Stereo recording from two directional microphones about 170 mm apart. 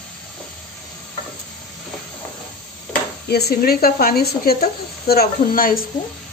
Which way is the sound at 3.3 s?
70° left (ahead or behind).